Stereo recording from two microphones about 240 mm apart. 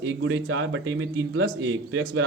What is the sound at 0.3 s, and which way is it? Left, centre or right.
Speech, right.